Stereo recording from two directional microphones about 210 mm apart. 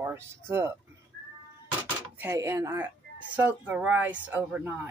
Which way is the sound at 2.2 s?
15° right (ahead or behind).